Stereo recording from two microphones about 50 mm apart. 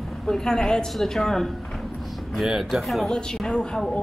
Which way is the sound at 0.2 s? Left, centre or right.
Centre.